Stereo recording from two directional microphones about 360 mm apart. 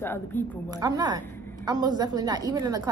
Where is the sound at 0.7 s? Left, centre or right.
Centre.